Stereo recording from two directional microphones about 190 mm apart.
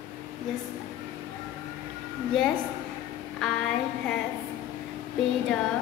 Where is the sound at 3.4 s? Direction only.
Centre (ahead or behind).